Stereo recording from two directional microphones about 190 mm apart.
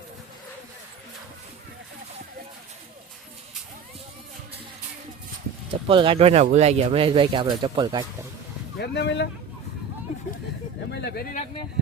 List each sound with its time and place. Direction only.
5.9 s speech: 25° right (ahead or behind)
8.8 s speech: 65° left (ahead or behind)
11.0 s a sound: 55° left (ahead or behind)